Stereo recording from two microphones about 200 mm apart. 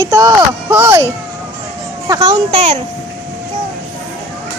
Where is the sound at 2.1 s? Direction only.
20° right (ahead or behind).